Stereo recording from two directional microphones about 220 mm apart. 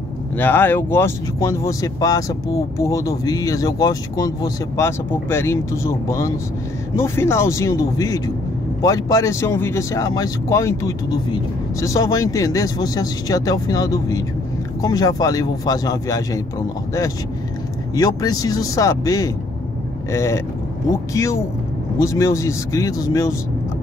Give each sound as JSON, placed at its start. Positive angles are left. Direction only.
{"t": 0.4, "sound": "speech", "side_deg": 10}
{"t": 17.9, "sound": "speech", "side_deg": 15}